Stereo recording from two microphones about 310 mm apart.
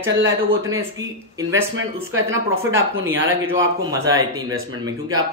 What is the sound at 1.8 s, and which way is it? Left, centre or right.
Speech, right.